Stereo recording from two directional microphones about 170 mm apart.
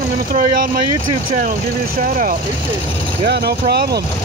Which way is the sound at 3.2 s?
65° right (ahead or behind).